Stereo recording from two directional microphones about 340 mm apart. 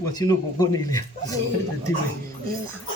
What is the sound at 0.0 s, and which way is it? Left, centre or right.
Speech, centre.